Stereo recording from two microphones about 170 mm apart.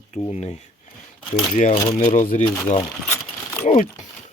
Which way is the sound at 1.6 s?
45° left (ahead or behind).